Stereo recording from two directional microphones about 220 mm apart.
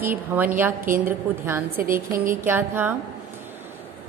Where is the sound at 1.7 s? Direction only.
40° right (ahead or behind).